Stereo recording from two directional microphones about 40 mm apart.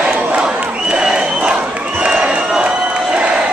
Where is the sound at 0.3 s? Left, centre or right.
Right.